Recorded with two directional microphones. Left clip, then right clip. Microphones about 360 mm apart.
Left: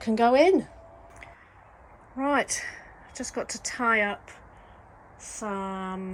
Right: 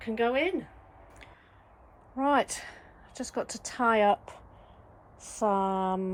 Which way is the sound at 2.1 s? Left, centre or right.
Centre.